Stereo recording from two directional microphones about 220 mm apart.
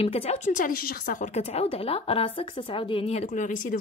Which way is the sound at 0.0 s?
30° left (ahead or behind).